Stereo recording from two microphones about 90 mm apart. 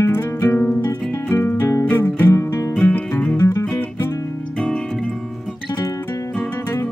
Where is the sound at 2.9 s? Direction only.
20° left (ahead or behind).